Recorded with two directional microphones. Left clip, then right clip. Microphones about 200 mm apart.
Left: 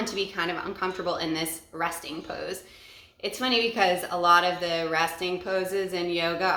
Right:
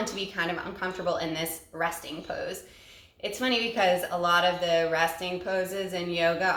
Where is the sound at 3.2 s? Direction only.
25° left (ahead or behind).